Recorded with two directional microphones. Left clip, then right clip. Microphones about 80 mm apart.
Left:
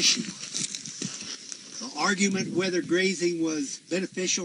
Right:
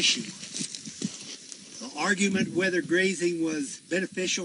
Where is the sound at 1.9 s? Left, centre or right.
Centre.